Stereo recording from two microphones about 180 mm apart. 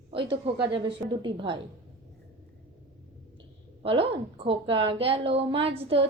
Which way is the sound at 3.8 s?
30° right (ahead or behind).